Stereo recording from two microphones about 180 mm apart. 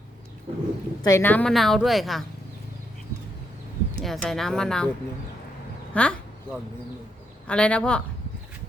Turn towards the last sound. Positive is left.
turn(degrees=5)  # may be behind; listen again after turning